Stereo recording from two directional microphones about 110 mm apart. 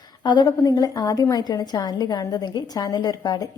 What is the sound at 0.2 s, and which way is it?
A woman's voice, 40° left (ahead or behind).